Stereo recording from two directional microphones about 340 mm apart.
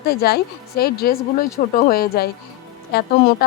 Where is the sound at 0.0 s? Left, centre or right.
Left.